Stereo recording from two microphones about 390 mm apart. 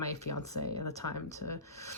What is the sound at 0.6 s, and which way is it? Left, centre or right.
Speech, left.